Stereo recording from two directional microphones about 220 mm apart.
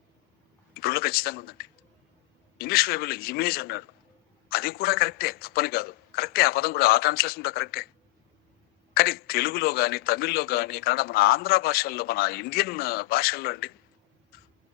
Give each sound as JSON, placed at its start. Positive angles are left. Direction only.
{"t": 0.7, "sound": "a man's voice", "side_deg": 45}
{"t": 8.9, "sound": "a man's voice", "side_deg": 45}